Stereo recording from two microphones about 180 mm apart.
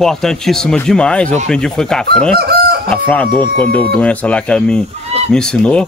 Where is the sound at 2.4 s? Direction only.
60° right (ahead or behind).